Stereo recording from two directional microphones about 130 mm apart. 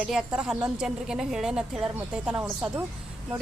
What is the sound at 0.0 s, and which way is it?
Speech, 5° right (ahead or behind).